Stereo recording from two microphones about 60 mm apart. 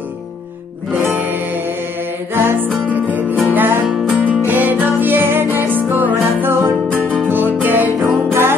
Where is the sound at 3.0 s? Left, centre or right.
Right.